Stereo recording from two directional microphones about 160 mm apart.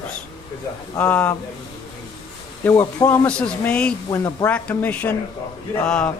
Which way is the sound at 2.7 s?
20° left (ahead or behind).